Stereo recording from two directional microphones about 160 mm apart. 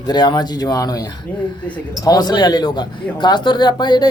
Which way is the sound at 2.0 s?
25° left (ahead or behind).